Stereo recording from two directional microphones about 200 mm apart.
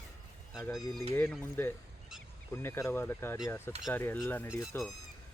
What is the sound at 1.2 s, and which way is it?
Speech, 10° left (ahead or behind).